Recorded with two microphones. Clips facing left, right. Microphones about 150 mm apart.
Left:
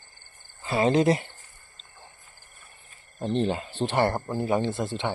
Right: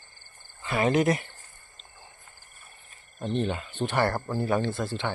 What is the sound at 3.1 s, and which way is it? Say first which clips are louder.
Speech: left 3 dB; 35° left (ahead or behind).